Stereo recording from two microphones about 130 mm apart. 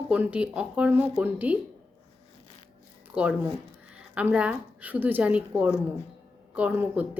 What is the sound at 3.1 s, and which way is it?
A woman's voice, 10° right (ahead or behind).